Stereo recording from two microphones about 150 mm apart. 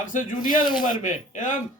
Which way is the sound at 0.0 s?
60° left (ahead or behind).